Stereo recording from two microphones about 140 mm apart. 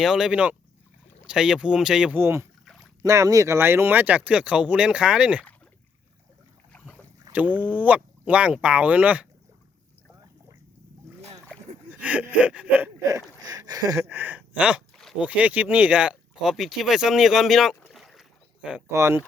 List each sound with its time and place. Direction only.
0.0 s speech: 5° right (ahead or behind)
2.1 s speech: 20° right (ahead or behind)
7.3 s speech: 10° right (ahead or behind)
11.9 s speech: 10° right (ahead or behind)
13.4 s a sound: 30° right (ahead or behind); by 14.8 s 10° right (ahead or behind)
14.9 s a sound: 5° left (ahead or behind)
15.3 s speech: 10° right (ahead or behind)
18.9 s speech: 20° right (ahead or behind)